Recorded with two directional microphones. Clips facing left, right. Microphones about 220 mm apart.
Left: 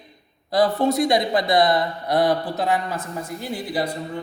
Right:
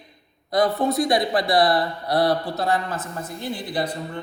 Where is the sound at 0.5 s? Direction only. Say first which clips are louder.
Left 1 dB; 25° left (ahead or behind).